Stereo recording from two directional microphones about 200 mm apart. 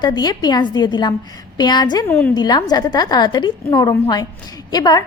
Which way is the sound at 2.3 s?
20° left (ahead or behind).